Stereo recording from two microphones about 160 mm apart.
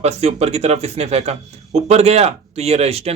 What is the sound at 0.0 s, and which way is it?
Speech, 40° right (ahead or behind).